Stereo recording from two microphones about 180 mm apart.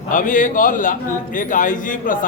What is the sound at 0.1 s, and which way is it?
A man's voice, 45° left (ahead or behind).